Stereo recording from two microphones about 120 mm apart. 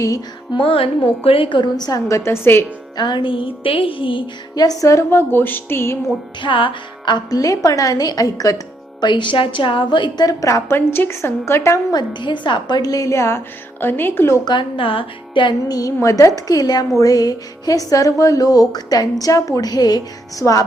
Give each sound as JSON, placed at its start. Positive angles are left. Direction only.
{"t": 0.5, "sound": "a woman's voice", "side_deg": 50}
{"t": 3.0, "sound": "a woman's voice", "side_deg": 40}
{"t": 6.4, "sound": "a woman's voice", "side_deg": 45}
{"t": 14.4, "sound": "speech", "side_deg": 40}
{"t": 15.8, "sound": "a woman's voice", "side_deg": 25}